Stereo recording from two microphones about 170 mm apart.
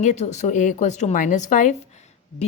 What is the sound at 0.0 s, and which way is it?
A woman's voice, 45° left (ahead or behind).